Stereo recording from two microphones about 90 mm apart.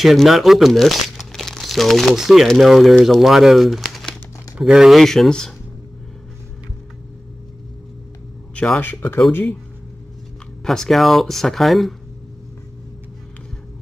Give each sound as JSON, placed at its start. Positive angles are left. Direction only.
{"t": 0.0, "sound": "speech", "side_deg": 0}
{"t": 8.5, "sound": "speech", "side_deg": 15}
{"t": 10.6, "sound": "speech", "side_deg": 5}